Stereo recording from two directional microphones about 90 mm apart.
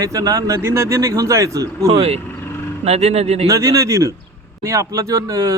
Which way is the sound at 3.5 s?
35° right (ahead or behind).